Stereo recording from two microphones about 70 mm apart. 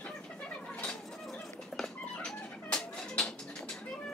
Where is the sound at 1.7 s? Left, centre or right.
Centre.